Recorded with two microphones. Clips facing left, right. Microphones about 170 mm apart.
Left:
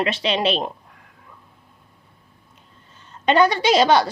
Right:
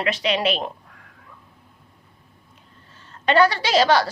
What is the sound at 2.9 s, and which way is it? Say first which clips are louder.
A woman's voice: left 1 dB; 20° left (ahead or behind).